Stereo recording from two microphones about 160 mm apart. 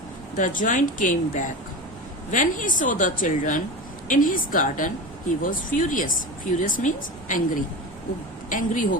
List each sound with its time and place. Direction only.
0.3 s a woman's voice: 55° left (ahead or behind)